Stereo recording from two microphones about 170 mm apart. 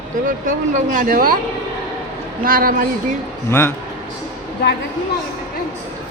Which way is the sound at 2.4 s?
55° right (ahead or behind).